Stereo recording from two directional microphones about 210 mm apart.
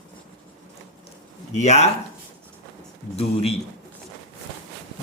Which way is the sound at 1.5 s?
30° left (ahead or behind).